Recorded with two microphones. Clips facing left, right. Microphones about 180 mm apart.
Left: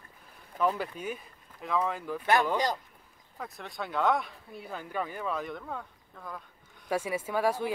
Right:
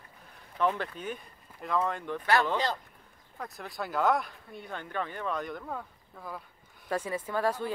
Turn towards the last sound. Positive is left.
turn(degrees=10)  # may be behind; listen again after turning